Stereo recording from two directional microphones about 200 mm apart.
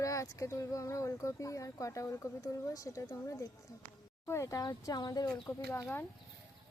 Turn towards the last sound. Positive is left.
turn(degrees=10)  # may be behind; listen again after turning